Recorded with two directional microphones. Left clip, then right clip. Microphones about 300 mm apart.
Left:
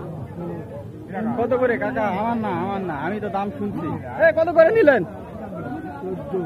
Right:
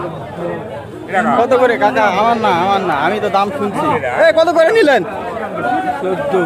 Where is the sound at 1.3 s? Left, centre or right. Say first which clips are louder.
Right 7 dB; centre.